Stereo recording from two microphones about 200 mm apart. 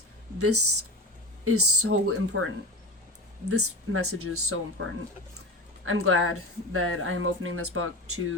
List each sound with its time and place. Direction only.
0.3 s speech: 90° right
3.5 s speech: 90° right